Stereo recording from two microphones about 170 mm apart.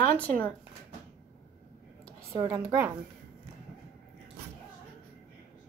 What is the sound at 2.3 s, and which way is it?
Speech, 20° right (ahead or behind).